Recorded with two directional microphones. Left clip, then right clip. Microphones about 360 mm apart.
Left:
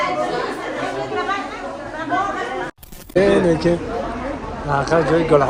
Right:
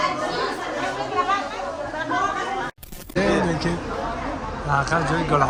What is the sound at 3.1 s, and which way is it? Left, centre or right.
Speech, centre.